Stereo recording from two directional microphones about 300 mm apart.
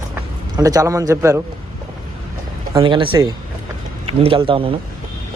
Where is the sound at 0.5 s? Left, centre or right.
Centre.